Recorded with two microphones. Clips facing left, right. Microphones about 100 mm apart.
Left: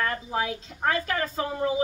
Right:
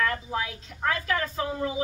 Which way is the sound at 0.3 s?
40° left (ahead or behind).